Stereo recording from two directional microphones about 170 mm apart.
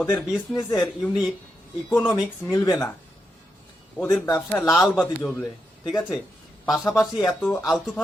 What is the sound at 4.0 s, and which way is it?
Speech, 10° left (ahead or behind).